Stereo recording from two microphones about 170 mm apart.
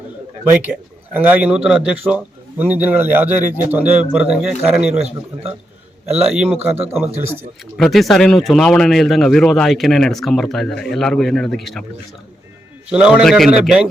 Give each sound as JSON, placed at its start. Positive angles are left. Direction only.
{"t": 0.5, "sound": "a man's voice", "side_deg": -10}
{"t": 5.0, "sound": "a man's voice", "side_deg": -35}
{"t": 6.2, "sound": "a man's voice", "side_deg": -5}
{"t": 7.8, "sound": "speech", "side_deg": 0}
{"t": 12.9, "sound": "speech", "side_deg": -5}